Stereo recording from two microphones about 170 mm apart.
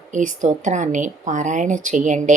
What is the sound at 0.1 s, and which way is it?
A woman's voice, 45° right (ahead or behind).